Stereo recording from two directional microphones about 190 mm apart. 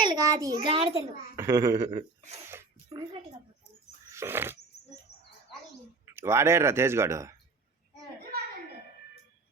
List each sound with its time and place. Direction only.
0.0 s a child's voice: 20° right (ahead or behind)
1.4 s speech: 15° right (ahead or behind)
4.1 s a sound: 10° right (ahead or behind)
6.1 s speech: 15° right (ahead or behind)